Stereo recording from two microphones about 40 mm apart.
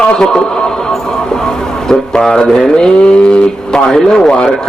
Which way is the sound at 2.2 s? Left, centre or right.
Centre.